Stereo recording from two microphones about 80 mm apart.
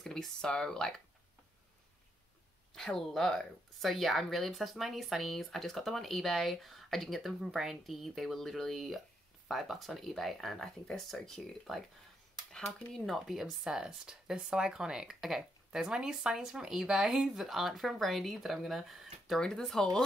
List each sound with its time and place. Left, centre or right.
0.0 s speech: centre
2.7 s speech: centre